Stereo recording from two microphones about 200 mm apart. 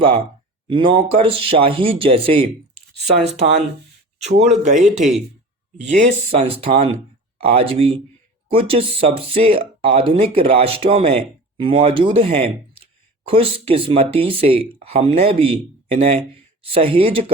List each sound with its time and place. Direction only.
0.7 s speech: 25° right (ahead or behind)
6.3 s speech: 30° right (ahead or behind)